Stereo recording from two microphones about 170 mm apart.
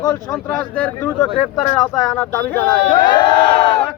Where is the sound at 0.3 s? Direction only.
5° left (ahead or behind).